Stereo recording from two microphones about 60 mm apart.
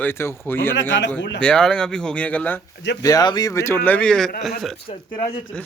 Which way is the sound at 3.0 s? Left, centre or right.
Left.